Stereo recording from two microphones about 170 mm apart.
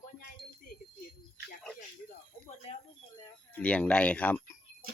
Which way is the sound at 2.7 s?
40° left (ahead or behind).